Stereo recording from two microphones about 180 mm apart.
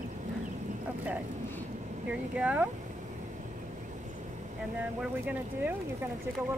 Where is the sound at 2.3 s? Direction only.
10° right (ahead or behind).